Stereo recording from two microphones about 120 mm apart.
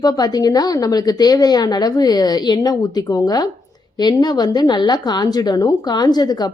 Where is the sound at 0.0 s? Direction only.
35° left (ahead or behind).